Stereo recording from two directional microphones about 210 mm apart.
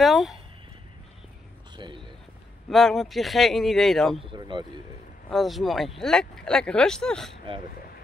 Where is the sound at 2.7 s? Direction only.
Centre (ahead or behind).